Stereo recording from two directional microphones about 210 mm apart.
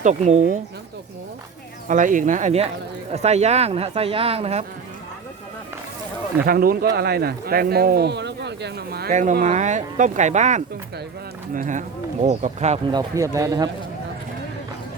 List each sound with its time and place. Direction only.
0.0 s speech: 35° right (ahead or behind)
1.9 s speech: 40° right (ahead or behind)
6.4 s speech: 45° right (ahead or behind)
12.9 s speech: 15° right (ahead or behind)